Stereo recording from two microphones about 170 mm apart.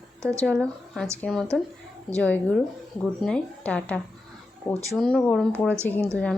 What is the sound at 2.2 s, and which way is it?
A woman's voice, 10° left (ahead or behind).